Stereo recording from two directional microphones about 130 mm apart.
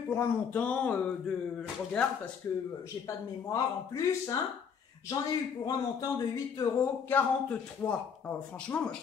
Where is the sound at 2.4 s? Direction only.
20° left (ahead or behind).